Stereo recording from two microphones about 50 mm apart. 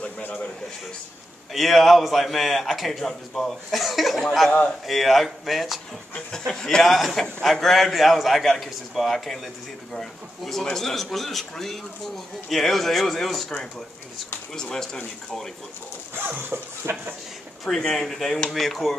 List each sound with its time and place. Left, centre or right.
0.0 s a sound: left
1.5 s a man's voice: centre
4.5 s a man's voice: left
4.8 s a man's voice: centre
6.1 s a man's voice: centre
16.2 s a sound: right
17.6 s a man's voice: centre